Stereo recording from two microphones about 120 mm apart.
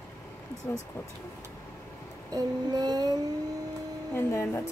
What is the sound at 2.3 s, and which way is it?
Child singing, 35° right (ahead or behind).